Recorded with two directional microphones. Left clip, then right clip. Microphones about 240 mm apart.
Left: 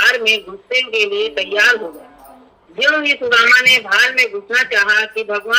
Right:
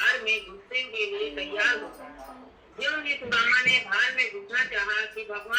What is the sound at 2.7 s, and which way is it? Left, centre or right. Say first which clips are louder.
A man's voice: left 14 dB; left.